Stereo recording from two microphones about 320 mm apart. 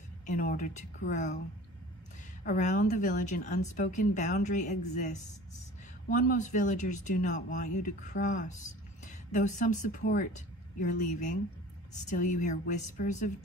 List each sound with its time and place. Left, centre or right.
0.3 s speech: left
2.4 s speech: left